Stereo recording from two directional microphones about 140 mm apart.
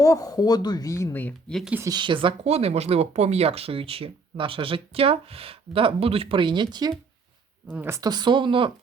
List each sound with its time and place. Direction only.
0.0 s speech: 25° left (ahead or behind)
1.9 s speech: 35° right (ahead or behind)
7.7 s speech: 15° right (ahead or behind); by 8.7 s 40° right (ahead or behind)